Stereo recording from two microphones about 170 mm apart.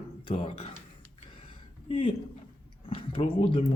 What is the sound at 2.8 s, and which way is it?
Speech, 35° left (ahead or behind).